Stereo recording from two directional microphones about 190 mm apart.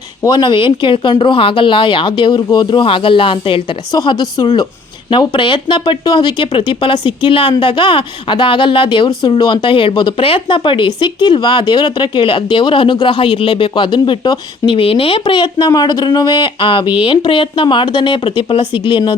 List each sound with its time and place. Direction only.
0.2 s speech: 25° left (ahead or behind)